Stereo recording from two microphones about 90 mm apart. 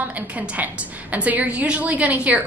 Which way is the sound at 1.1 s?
15° right (ahead or behind).